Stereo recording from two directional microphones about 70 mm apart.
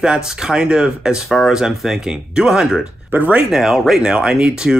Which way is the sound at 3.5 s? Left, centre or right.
Centre.